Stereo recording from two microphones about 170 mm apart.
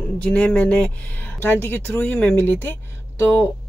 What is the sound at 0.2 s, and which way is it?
Speech, 10° left (ahead or behind).